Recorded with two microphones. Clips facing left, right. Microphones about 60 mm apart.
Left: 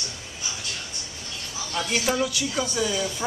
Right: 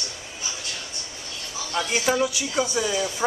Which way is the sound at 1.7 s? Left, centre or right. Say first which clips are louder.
Right 2 dB; centre.